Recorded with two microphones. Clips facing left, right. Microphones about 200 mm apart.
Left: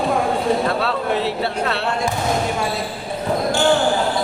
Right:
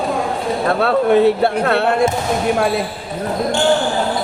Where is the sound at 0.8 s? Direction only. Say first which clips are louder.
Right 8 dB; 55° right (ahead or behind).